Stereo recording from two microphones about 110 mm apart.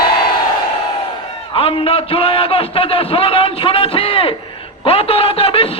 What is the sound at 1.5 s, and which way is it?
A man's voice, 60° left (ahead or behind).